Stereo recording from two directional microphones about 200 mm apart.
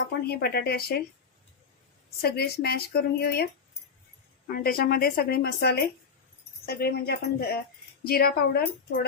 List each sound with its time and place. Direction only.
0.3 s speech: 55° left (ahead or behind)
2.2 s speech: 50° left (ahead or behind)
4.5 s speech: 50° left (ahead or behind)